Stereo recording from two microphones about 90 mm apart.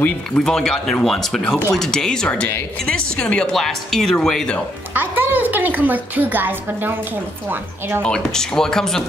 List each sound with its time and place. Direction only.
0.4 s speech: 5° left (ahead or behind)
4.9 s a woman's voice: 20° right (ahead or behind)
8.0 s speech: 10° left (ahead or behind)